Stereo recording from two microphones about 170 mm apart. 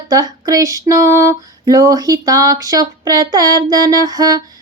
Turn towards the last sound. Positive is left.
turn(degrees=-20)  # may be behind; listen again after turning